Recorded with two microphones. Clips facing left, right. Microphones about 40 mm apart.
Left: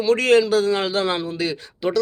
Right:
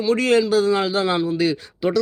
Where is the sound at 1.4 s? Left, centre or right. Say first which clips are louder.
Right 3 dB; centre.